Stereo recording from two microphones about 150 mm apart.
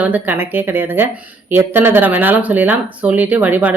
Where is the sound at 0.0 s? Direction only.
10° right (ahead or behind).